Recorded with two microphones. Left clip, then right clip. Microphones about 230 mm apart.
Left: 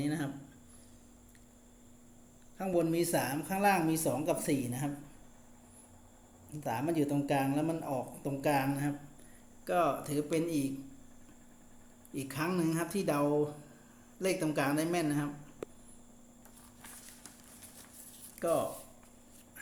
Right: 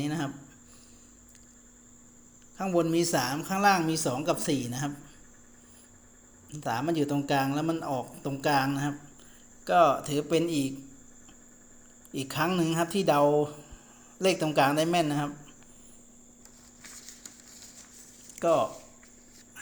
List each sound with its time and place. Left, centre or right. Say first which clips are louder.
0.0 s a man's voice: right 3 dB; right
2.6 s a man's voice: right 5 dB; right
6.5 s a man's voice: right 5 dB; right
12.1 s a man's voice: right 6 dB; right
18.3 s speech: right 7 dB; right